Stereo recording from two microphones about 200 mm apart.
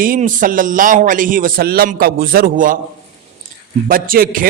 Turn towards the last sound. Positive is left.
turn(degrees=-45)  # may be behind; listen again after turning